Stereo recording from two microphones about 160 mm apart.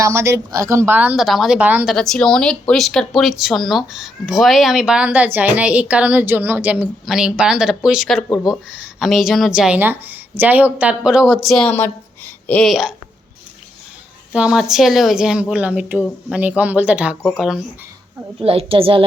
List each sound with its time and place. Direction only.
0.0 s a woman's voice: 15° right (ahead or behind); by 12.9 s centre (ahead or behind)
14.3 s a woman's voice: 5° right (ahead or behind)
18.3 s a child's voice: 35° right (ahead or behind)